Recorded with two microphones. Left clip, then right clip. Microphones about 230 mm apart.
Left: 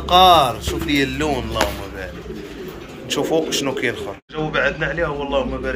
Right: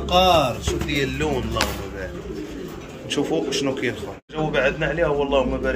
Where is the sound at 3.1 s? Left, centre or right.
Centre.